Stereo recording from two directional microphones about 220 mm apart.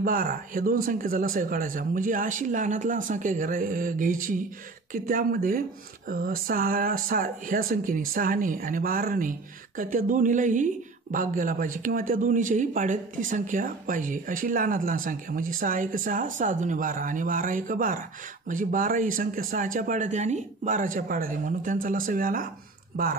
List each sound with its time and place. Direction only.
0.0 s speech: 40° right (ahead or behind)